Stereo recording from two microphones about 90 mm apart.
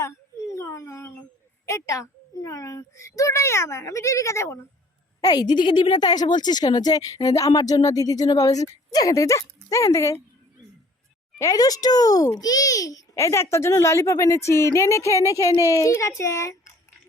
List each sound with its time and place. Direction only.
0.0 s a sound: 35° left (ahead or behind)
1.6 s a child's voice: 35° left (ahead or behind)
5.2 s speech: 45° left (ahead or behind)
11.3 s a child's voice: 40° left (ahead or behind)